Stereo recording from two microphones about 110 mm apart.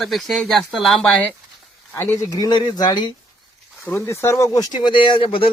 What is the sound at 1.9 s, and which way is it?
Speech, 25° left (ahead or behind).